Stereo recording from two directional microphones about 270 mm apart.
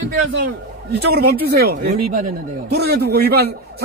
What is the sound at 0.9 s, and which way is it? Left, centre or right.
Speech, right.